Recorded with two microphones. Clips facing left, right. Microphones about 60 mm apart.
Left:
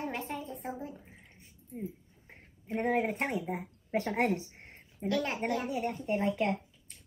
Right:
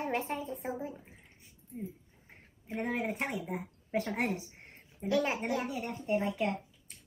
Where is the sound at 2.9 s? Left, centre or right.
Left.